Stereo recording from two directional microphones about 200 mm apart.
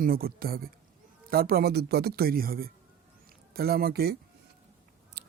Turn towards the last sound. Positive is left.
turn(degrees=-60)  # may be behind; listen again after turning